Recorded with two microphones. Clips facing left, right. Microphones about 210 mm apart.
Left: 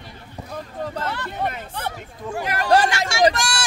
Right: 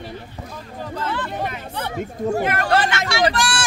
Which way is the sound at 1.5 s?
45° left (ahead or behind).